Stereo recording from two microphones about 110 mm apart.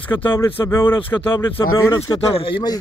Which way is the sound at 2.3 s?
55° left (ahead or behind).